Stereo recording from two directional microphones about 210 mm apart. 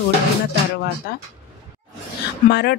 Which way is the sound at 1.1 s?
50° left (ahead or behind).